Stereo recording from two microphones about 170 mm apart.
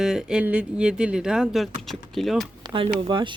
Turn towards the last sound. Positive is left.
turn(degrees=-30)  # may be behind; listen again after turning